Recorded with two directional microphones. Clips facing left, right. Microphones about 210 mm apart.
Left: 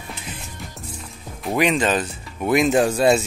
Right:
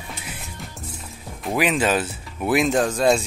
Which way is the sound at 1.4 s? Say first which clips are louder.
Left 1 dB; centre (ahead or behind).